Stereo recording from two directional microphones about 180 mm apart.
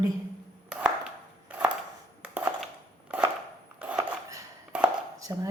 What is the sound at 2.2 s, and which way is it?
Crushing, 5° right (ahead or behind).